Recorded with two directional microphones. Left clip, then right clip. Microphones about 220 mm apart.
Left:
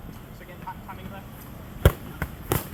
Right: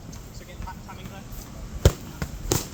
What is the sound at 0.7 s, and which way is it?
Vehicle, centre (ahead or behind).